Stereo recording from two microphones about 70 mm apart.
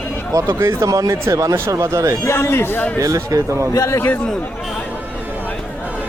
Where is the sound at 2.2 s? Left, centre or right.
Left.